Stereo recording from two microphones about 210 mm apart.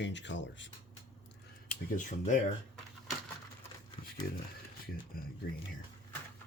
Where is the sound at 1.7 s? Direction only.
35° left (ahead or behind).